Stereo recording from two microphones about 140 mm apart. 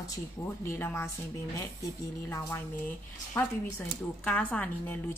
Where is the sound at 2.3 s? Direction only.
20° left (ahead or behind).